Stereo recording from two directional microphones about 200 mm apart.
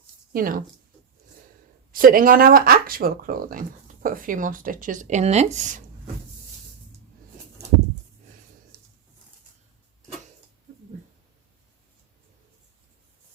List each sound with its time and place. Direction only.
0.3 s speech: 45° right (ahead or behind)
1.9 s speech: 45° right (ahead or behind)